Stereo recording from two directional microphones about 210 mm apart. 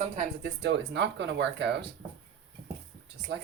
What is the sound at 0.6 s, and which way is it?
Speech, 55° right (ahead or behind).